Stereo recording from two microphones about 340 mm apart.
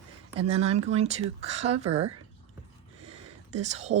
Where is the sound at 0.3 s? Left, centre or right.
Centre.